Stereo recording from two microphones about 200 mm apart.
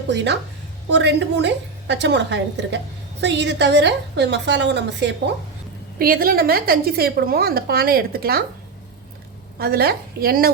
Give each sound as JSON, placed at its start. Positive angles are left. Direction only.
{"t": 0.1, "sound": "a woman's voice", "side_deg": -60}
{"t": 6.0, "sound": "a woman's voice", "side_deg": -45}
{"t": 9.6, "sound": "a woman's voice", "side_deg": -50}